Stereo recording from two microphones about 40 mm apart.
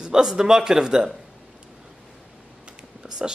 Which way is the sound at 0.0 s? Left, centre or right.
Centre.